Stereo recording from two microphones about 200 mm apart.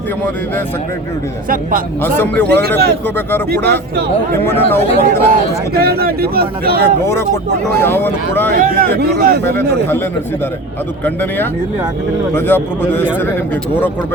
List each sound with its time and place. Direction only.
2.0 s speech: 10° left (ahead or behind)
2.5 s speech: 55° right (ahead or behind)
3.2 s speech: 10° left (ahead or behind)
5.7 s speech: 50° right (ahead or behind)
7.0 s speech: 10° left (ahead or behind)
8.5 s speech: 45° right (ahead or behind)
9.4 s speech: 10° left (ahead or behind)
11.0 s speech: 10° left (ahead or behind)